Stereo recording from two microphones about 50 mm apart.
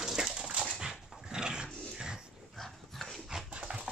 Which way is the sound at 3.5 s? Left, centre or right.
Right.